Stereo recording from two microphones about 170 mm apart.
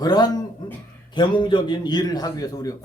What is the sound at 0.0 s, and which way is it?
A man's voice, 25° left (ahead or behind).